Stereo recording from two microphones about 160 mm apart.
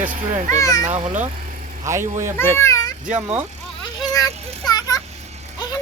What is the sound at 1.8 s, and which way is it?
Speech, 15° right (ahead or behind).